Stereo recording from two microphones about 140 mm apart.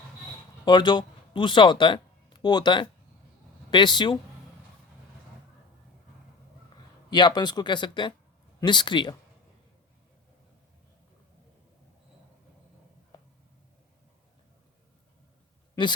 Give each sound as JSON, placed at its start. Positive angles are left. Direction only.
{"t": 0.6, "sound": "speech", "side_deg": 35}
{"t": 7.1, "sound": "speech", "side_deg": 30}